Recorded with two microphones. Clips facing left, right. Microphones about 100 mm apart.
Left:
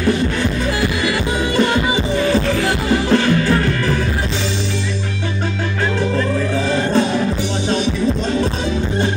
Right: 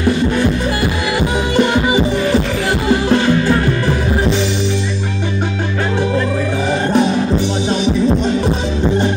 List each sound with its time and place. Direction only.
1.9 s music: 15° right (ahead or behind)